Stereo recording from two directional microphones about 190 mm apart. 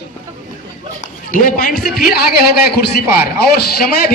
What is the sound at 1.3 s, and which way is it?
Speech, 45° left (ahead or behind).